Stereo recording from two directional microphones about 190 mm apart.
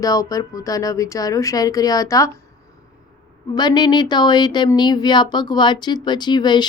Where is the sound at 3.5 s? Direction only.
20° left (ahead or behind).